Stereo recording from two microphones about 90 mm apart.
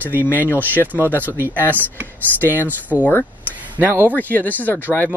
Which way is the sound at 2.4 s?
20° left (ahead or behind).